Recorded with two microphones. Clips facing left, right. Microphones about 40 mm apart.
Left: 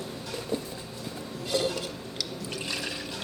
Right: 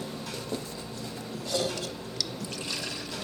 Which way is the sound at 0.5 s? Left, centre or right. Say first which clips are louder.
Left 4 dB; left.